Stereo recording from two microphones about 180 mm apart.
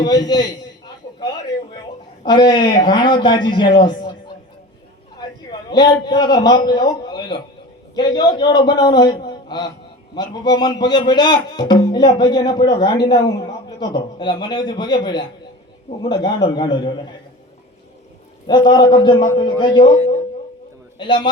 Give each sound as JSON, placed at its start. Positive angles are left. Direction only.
{"t": 0.0, "sound": "speech", "side_deg": 20}
{"t": 1.2, "sound": "a sound", "side_deg": 25}
{"t": 2.2, "sound": "speech", "side_deg": 25}
{"t": 5.5, "sound": "a man's voice", "side_deg": 25}
{"t": 18.4, "sound": "speech", "side_deg": 25}
{"t": 21.0, "sound": "speech", "side_deg": 25}